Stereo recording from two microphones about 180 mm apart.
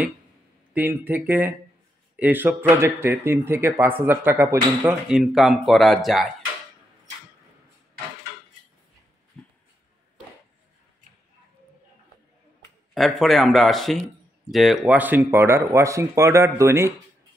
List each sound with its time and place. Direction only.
0.7 s speech: 10° right (ahead or behind)
12.9 s speech: centre (ahead or behind); by 16.9 s 15° right (ahead or behind)